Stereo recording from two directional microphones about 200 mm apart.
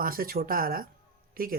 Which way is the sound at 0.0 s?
45° right (ahead or behind).